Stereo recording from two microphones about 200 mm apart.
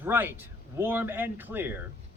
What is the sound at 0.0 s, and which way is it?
A man's voice, 10° right (ahead or behind).